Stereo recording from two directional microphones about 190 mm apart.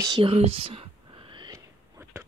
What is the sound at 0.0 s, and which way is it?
Whispering, 25° right (ahead or behind).